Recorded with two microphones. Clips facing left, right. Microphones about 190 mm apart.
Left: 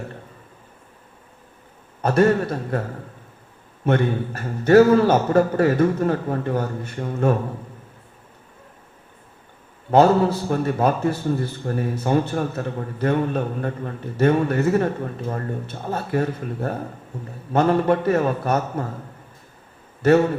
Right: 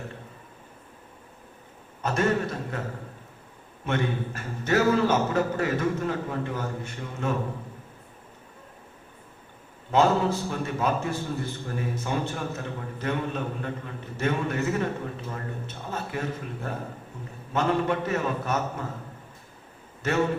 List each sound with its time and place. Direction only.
2.0 s a man's voice: 45° left (ahead or behind)
3.8 s a man's voice: 45° left (ahead or behind)
9.9 s a man's voice: 45° left (ahead or behind)